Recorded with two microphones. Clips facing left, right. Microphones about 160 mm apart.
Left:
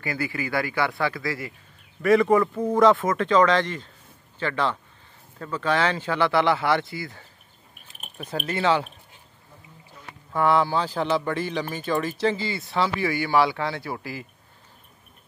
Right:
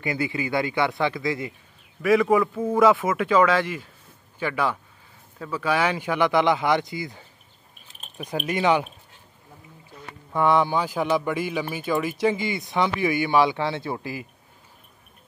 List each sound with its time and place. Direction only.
0.0 s speech: 20° right (ahead or behind)
2.0 s speech: centre (ahead or behind)
10.3 s speech: 20° right (ahead or behind)